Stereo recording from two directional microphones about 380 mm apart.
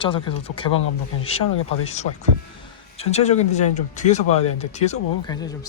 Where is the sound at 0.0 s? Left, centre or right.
Centre.